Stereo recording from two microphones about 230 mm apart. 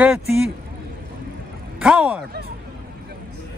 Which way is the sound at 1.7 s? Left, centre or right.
Centre.